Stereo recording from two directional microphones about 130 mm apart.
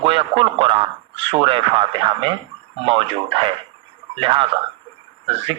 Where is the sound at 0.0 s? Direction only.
40° right (ahead or behind).